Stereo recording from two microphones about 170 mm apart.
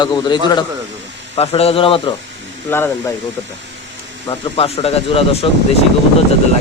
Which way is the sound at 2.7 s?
15° left (ahead or behind).